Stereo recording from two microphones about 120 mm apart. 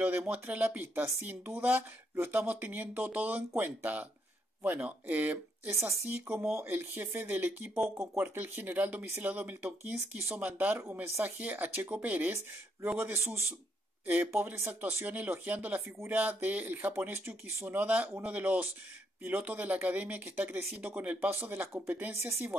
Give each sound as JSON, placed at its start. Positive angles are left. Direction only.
{"t": 0.0, "sound": "speech", "side_deg": -15}
{"t": 6.1, "sound": "a man's voice", "side_deg": -10}